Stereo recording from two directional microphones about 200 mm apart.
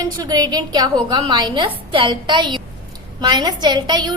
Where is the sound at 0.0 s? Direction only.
20° right (ahead or behind).